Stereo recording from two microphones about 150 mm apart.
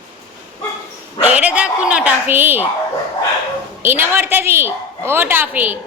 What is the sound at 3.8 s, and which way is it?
A woman's voice, 15° right (ahead or behind).